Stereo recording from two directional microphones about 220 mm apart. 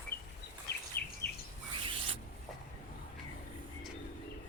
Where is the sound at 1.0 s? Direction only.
45° left (ahead or behind).